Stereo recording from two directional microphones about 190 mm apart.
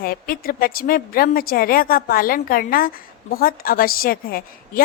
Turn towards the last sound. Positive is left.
turn(degrees=50)  # may be behind; listen again after turning